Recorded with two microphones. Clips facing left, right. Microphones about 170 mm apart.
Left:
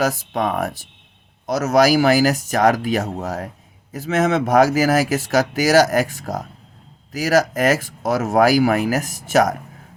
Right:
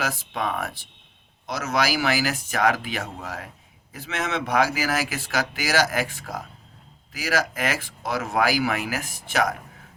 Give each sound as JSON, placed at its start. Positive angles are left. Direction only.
{"t": 0.0, "sound": "speech", "side_deg": 45}